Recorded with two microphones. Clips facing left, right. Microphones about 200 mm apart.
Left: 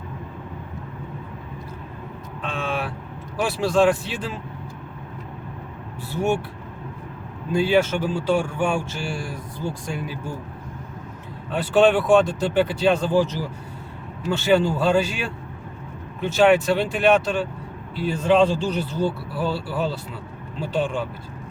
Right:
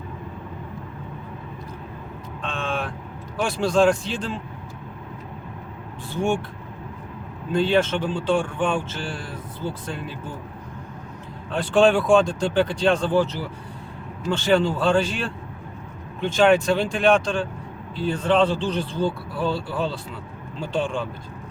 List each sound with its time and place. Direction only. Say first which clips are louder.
2.4 s vehicle: left 1 dB; 5° left (ahead or behind)
3.4 s speech: even; 5° left (ahead or behind)
6.1 s speech: left 1 dB; 5° left (ahead or behind)
7.5 s speech: left 1 dB; 10° left (ahead or behind)
11.5 s speech: even; 5° left (ahead or behind)